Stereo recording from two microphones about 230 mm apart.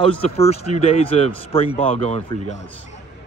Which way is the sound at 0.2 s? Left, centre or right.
Left.